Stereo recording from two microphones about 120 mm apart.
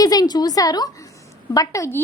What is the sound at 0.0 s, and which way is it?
A woman's voice, 30° left (ahead or behind).